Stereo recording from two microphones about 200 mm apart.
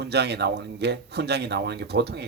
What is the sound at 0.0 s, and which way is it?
Speech, 55° right (ahead or behind).